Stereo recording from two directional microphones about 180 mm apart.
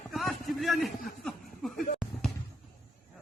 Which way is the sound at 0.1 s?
Centre (ahead or behind).